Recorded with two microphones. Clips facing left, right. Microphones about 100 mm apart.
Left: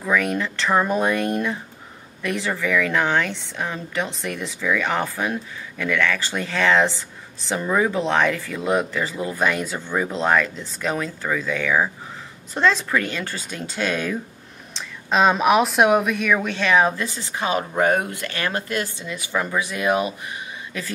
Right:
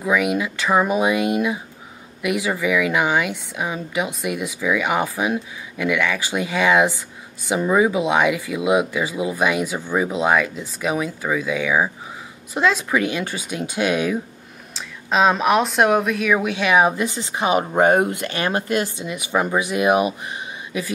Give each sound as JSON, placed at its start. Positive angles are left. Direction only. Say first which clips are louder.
{"t": 0.0, "sound": "speech", "louder": "right 2 dB", "side_deg": -10}
{"t": 14.7, "sound": "speech", "louder": "even", "side_deg": 0}
{"t": 16.3, "sound": "speech", "louder": "right 2 dB", "side_deg": -10}